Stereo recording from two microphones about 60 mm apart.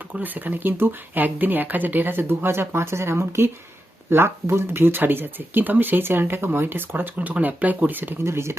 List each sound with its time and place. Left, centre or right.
0.2 s speech: right
8.2 s speech: right